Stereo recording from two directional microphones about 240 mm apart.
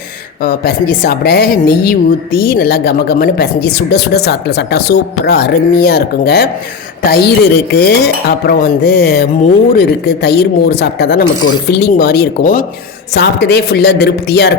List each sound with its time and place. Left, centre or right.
0.4 s a woman's voice: left